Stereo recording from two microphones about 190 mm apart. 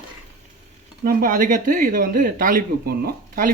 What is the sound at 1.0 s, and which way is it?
Speech, 50° right (ahead or behind).